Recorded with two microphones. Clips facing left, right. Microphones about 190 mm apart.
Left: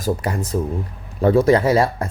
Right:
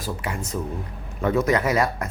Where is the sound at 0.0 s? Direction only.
40° left (ahead or behind).